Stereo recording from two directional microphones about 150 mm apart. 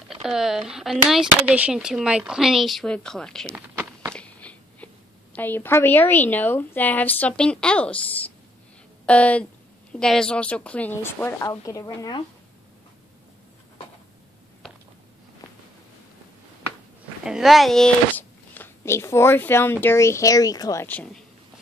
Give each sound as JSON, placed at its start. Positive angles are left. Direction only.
{"t": 0.1, "sound": "speech", "side_deg": -5}
{"t": 3.5, "sound": "a sound", "side_deg": -15}
{"t": 4.1, "sound": "a sound", "side_deg": 10}
{"t": 5.3, "sound": "a woman's voice", "side_deg": 10}
{"t": 9.0, "sound": "a woman's voice", "side_deg": 10}
{"t": 17.2, "sound": "speech", "side_deg": -5}
{"t": 20.8, "sound": "a woman's voice", "side_deg": 10}